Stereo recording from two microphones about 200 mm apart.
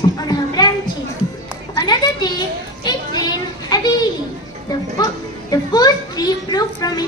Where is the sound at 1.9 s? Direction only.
20° left (ahead or behind).